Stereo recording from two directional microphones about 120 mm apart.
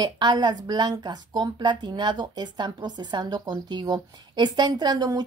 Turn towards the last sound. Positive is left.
turn(degrees=-35)  # may be behind; listen again after turning